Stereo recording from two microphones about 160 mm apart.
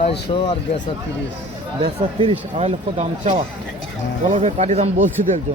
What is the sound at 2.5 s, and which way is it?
Speech, 45° right (ahead or behind).